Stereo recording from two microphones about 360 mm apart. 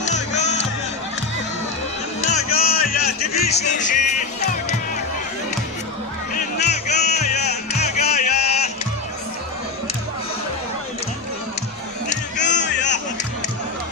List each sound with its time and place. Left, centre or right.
0.0 s music: centre
2.2 s music: left
3.3 s speech: centre
6.3 s music: centre
12.1 s a sound: centre